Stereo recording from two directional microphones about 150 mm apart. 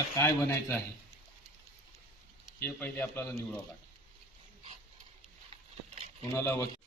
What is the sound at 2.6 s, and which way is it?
Speech, 10° left (ahead or behind).